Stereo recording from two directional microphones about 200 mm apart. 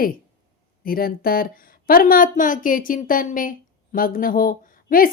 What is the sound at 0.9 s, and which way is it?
Speech, 50° left (ahead or behind).